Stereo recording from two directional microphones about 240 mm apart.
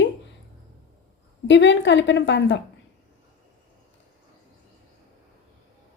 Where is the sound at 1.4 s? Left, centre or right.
Left.